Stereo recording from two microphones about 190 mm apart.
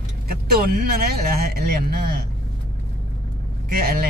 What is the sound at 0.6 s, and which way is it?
Speech, 50° right (ahead or behind).